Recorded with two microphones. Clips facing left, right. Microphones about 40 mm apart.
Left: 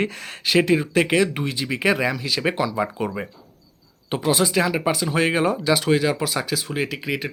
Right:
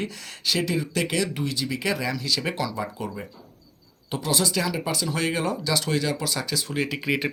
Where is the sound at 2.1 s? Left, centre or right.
Left.